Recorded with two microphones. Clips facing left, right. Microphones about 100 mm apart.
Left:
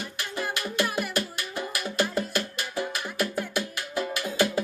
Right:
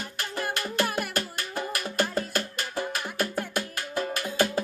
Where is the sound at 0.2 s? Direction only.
40° right (ahead or behind).